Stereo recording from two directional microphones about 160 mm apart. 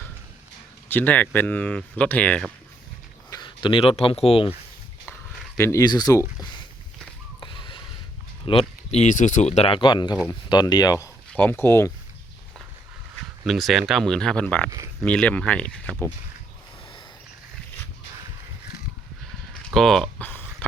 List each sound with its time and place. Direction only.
0.9 s speech: 10° left (ahead or behind)
3.2 s speech: 25° left (ahead or behind)
5.5 s speech: 20° left (ahead or behind)
7.3 s a sound: 30° left (ahead or behind)
8.4 s speech: 40° left (ahead or behind); by 11.9 s 15° left (ahead or behind)
13.4 s speech: centre (ahead or behind)
19.7 s a sound: centre (ahead or behind)